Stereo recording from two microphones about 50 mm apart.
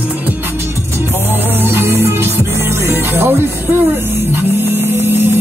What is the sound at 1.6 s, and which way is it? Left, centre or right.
Music, right.